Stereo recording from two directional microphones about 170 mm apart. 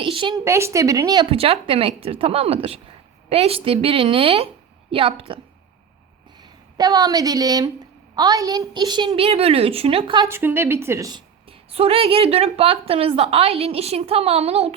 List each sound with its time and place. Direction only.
0.0 s a sound: 30° right (ahead or behind)
0.3 s a woman's voice: 15° right (ahead or behind); by 5.4 s 35° right (ahead or behind)
6.4 s speech: 20° right (ahead or behind)
10.2 s a woman's voice: 15° right (ahead or behind)
11.4 s a woman's voice: 35° right (ahead or behind)